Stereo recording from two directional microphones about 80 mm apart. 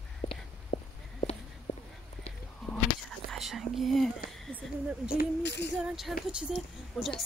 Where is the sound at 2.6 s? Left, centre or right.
Centre.